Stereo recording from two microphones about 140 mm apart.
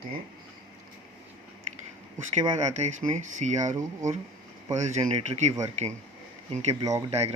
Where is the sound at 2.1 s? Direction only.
30° right (ahead or behind).